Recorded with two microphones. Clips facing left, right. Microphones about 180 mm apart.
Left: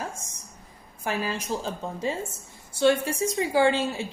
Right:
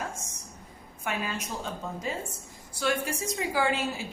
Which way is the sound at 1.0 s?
35° left (ahead or behind).